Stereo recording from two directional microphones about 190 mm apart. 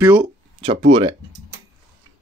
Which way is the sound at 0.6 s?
30° right (ahead or behind).